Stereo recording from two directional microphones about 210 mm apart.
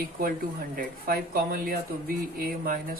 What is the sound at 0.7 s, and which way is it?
Speech, 45° right (ahead or behind).